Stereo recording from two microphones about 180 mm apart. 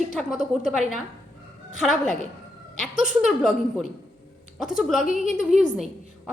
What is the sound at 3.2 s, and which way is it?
A woman's voice, centre (ahead or behind).